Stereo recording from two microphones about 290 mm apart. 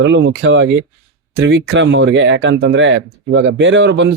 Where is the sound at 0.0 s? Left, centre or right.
Right.